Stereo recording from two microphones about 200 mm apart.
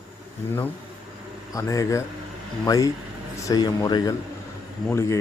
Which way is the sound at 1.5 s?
15° left (ahead or behind).